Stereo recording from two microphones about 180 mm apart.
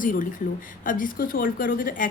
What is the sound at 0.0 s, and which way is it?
A woman's voice, 50° left (ahead or behind).